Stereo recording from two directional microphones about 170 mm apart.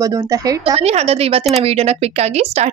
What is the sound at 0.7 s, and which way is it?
Speech, 35° right (ahead or behind).